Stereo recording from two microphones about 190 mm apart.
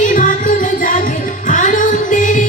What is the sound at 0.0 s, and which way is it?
Music, 45° left (ahead or behind).